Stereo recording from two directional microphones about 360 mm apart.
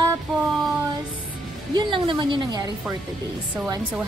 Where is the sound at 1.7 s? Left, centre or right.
Centre.